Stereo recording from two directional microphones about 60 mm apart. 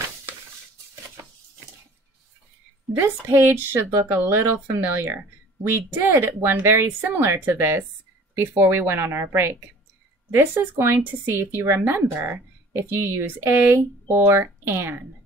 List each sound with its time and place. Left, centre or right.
3.0 s a woman's voice: right
11.8 s speech: right
12.3 s speech: right
13.6 s speech: right